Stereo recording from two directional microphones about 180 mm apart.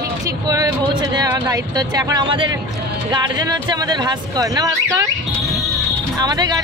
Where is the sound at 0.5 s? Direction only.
20° right (ahead or behind).